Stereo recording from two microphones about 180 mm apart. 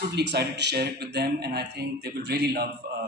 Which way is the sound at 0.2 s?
70° right (ahead or behind).